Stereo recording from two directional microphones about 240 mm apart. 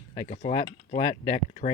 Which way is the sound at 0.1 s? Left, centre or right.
Left.